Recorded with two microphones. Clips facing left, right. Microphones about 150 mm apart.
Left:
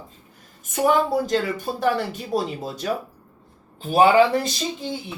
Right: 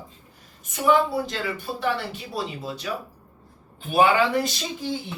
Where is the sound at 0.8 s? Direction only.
45° left (ahead or behind).